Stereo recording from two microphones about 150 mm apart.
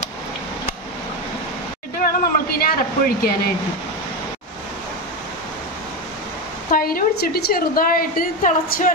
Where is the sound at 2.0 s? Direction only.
70° left (ahead or behind).